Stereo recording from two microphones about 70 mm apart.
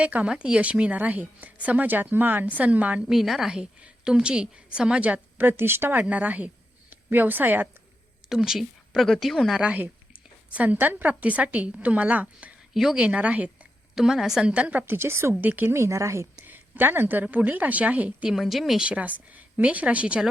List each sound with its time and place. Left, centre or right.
0.0 s a woman's voice: centre
3.1 s a woman's voice: centre; by 7.7 s right
8.3 s speech: centre
9.6 s a woman's voice: centre
12.7 s speech: centre
13.0 s a woman's voice: centre
13.9 s a woman's voice: centre; by 14.9 s right
14.9 s a woman's voice: right
15.4 s a woman's voice: right
15.7 s speech: right
16.5 s a sound: right
17.3 s a woman's voice: right
18.3 s speech: centre
18.9 s a woman's voice: centre